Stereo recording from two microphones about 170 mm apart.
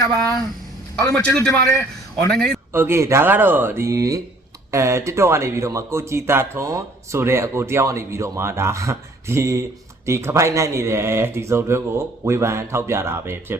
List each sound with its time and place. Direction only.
0.9 s a man's voice: 20° left (ahead or behind)
1.3 s a man's voice: 5° left (ahead or behind)
2.7 s speech: 15° right (ahead or behind)